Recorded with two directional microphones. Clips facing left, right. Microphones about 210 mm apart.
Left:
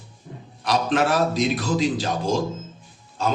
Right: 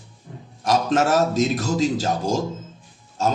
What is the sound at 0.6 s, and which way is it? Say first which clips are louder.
A man's voice: right 2 dB; 45° right (ahead or behind).